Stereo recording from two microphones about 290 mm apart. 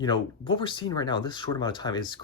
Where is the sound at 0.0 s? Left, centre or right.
Centre.